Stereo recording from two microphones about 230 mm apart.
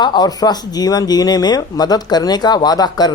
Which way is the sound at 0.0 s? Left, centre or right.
Centre.